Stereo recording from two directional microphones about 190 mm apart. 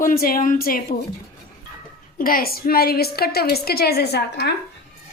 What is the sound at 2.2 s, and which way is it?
A woman's voice, 50° left (ahead or behind).